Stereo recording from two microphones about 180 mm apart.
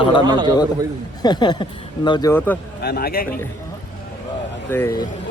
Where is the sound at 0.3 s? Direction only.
25° right (ahead or behind).